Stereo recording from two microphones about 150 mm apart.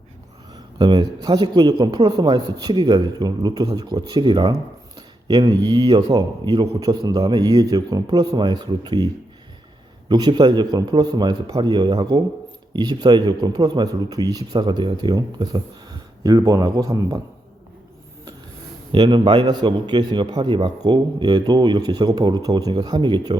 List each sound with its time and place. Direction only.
0.5 s a man's voice: 35° right (ahead or behind)
10.1 s a man's voice: 30° right (ahead or behind)
18.9 s a man's voice: 30° right (ahead or behind)